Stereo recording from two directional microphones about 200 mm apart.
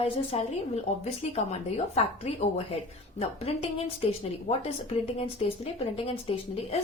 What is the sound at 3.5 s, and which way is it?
Speech, 30° left (ahead or behind).